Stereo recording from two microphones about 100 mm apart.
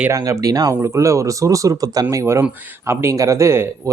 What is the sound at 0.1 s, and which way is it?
A man's voice, 30° right (ahead or behind).